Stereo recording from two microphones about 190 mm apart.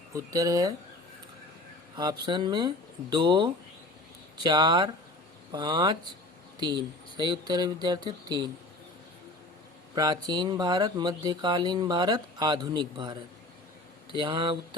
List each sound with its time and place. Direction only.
0.1 s speech: 15° right (ahead or behind)
2.0 s speech: 20° right (ahead or behind)
9.9 s speech: 20° right (ahead or behind)